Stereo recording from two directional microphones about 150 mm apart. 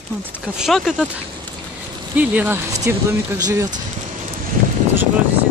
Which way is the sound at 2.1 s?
10° right (ahead or behind).